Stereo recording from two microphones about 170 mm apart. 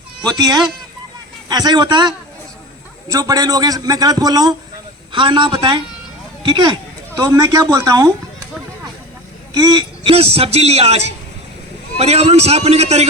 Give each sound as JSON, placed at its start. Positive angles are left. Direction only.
{"t": 0.3, "sound": "a man's voice", "side_deg": -25}
{"t": 9.5, "sound": "a man's voice", "side_deg": -25}